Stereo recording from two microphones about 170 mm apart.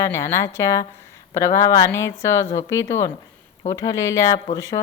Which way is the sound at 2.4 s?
40° left (ahead or behind).